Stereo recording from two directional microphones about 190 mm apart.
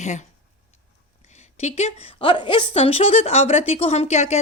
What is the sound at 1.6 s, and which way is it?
A woman's voice, 35° left (ahead or behind).